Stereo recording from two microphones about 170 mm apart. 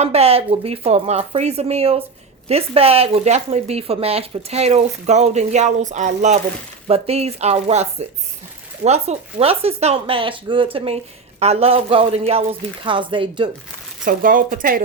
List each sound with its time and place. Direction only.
0.0 s speech: 35° right (ahead or behind)
14.0 s speech: 55° right (ahead or behind)